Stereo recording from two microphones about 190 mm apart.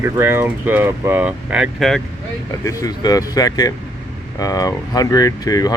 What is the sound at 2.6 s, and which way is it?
Speech, 20° left (ahead or behind).